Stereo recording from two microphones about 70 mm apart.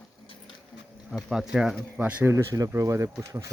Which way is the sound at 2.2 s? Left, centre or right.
Right.